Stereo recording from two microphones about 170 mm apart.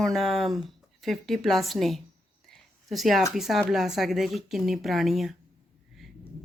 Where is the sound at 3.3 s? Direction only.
Centre (ahead or behind).